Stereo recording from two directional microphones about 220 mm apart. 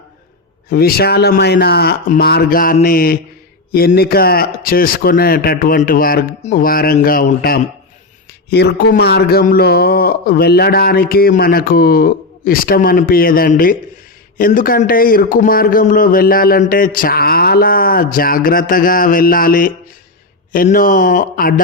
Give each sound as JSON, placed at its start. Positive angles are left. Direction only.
{"t": 0.7, "sound": "a man's voice", "side_deg": 45}